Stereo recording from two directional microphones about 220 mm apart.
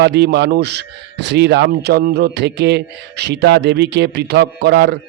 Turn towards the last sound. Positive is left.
turn(degrees=-50)  # may be behind; listen again after turning